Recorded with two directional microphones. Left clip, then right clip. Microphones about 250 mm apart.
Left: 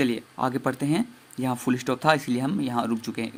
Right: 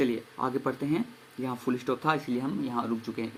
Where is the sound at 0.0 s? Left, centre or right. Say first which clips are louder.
Left 3 dB; left.